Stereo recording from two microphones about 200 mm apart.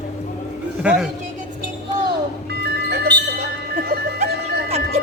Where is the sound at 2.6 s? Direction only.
55° right (ahead or behind).